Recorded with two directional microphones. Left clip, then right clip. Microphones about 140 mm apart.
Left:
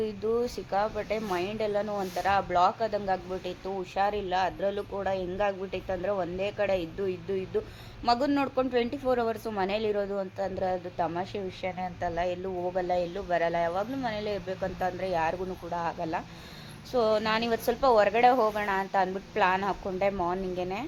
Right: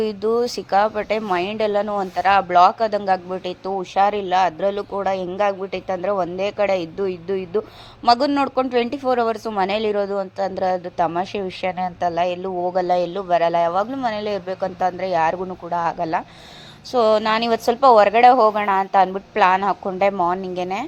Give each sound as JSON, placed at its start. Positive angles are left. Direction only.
{"t": 0.0, "sound": "speech", "side_deg": -35}